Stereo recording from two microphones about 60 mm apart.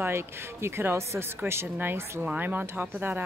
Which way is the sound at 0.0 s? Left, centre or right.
Right.